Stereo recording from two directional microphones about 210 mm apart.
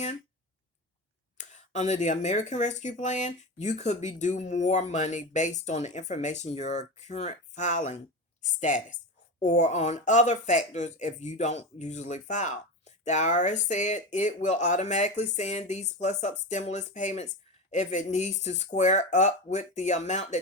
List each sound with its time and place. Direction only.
1.4 s speech: 35° left (ahead or behind)